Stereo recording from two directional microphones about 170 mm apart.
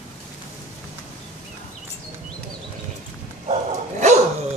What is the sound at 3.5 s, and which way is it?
Dog, 45° right (ahead or behind).